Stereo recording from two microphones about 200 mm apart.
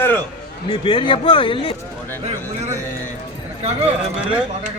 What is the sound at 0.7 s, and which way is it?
Speech, 25° left (ahead or behind).